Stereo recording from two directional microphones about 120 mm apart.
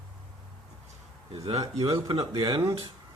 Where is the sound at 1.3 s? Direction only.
55° right (ahead or behind).